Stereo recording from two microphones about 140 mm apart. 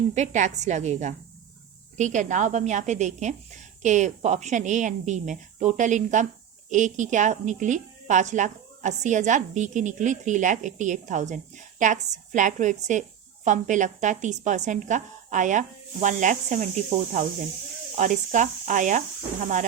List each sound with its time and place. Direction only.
0.1 s speech: 60° right (ahead or behind)